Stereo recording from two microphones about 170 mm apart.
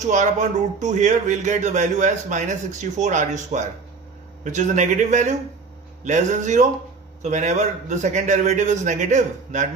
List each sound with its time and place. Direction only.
0.0 s speech: 45° right (ahead or behind)